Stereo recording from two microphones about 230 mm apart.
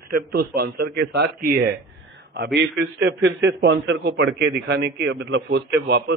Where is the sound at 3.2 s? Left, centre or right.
Right.